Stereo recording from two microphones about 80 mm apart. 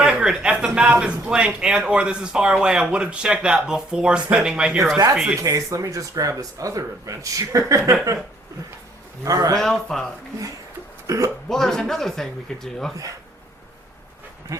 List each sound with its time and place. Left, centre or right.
0.0 s speech: centre
5.4 s speech: right
9.2 s speech: right
9.6 s a man's voice: centre
11.0 s a sound: right
11.4 s a man's voice: centre